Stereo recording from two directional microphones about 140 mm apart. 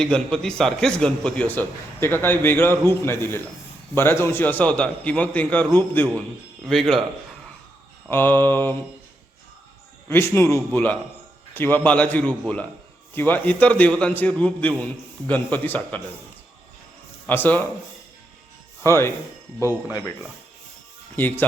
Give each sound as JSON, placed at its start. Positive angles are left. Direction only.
{"t": 0.0, "sound": "a man's voice", "side_deg": 5}
{"t": 6.7, "sound": "a man's voice", "side_deg": 5}
{"t": 8.1, "sound": "a man's voice", "side_deg": 15}
{"t": 10.1, "sound": "a man's voice", "side_deg": 20}
{"t": 17.2, "sound": "a man's voice", "side_deg": 15}
{"t": 18.8, "sound": "speech", "side_deg": 20}
{"t": 21.2, "sound": "a man's voice", "side_deg": 15}